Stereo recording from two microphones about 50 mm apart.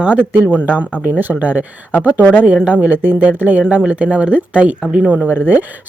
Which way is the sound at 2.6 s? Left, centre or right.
Right.